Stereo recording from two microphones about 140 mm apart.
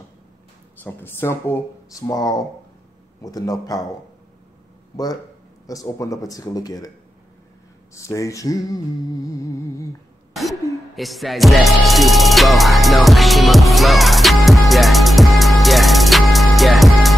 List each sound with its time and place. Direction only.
0.8 s humming: 15° left (ahead or behind)
3.2 s a man's voice: 25° left (ahead or behind)
5.7 s humming: 25° left (ahead or behind)
7.9 s humming: 20° left (ahead or behind)
10.6 s a sound: 20° left (ahead or behind)
11.0 s music: centre (ahead or behind)